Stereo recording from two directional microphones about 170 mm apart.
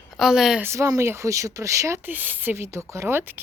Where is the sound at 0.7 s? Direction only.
20° right (ahead or behind).